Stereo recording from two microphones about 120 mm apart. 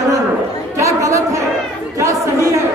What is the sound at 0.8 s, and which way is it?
Chatter, 25° right (ahead or behind).